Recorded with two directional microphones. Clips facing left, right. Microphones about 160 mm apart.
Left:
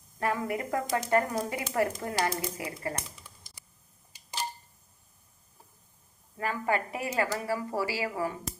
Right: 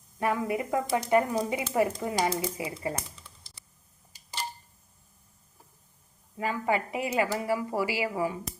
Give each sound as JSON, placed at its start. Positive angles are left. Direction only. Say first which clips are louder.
{"t": 0.2, "sound": "a woman's voice", "louder": "right 2 dB", "side_deg": -20}
{"t": 3.2, "sound": "a sound", "louder": "even", "side_deg": 15}
{"t": 6.3, "sound": "a woman's voice", "louder": "right 1 dB", "side_deg": -15}